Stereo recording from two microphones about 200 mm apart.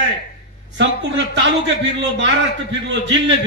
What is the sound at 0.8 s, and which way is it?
Speech, 65° right (ahead or behind).